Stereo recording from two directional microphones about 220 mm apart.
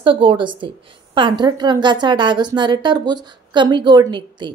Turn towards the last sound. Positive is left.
turn(degrees=-20)  # may be behind; listen again after turning